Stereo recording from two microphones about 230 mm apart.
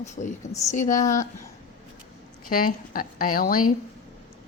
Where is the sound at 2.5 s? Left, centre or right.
Left.